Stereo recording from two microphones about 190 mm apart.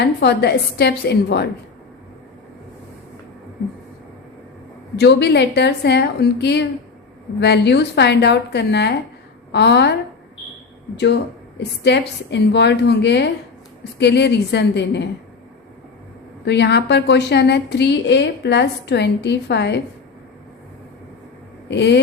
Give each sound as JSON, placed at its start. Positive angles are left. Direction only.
{"t": 0.0, "sound": "a woman's voice", "side_deg": 60}
{"t": 4.9, "sound": "a woman's voice", "side_deg": 60}
{"t": 16.5, "sound": "a woman's voice", "side_deg": 65}
{"t": 21.7, "sound": "a woman's voice", "side_deg": 65}